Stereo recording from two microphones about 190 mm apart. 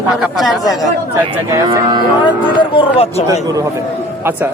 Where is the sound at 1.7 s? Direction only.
20° right (ahead or behind).